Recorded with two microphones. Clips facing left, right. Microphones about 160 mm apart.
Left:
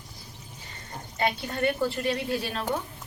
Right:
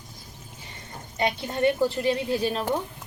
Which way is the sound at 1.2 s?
20° right (ahead or behind).